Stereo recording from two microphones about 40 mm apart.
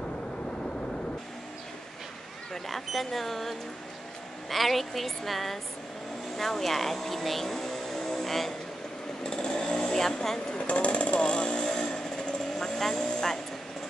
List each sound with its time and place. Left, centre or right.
2.5 s a woman's voice: centre
9.2 s chainsaw: centre
10.7 s jackhammer: left
12.5 s vehicle: centre